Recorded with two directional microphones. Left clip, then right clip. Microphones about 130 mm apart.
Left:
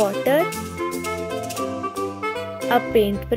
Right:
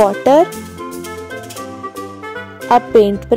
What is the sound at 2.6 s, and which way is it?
Speech, 45° right (ahead or behind).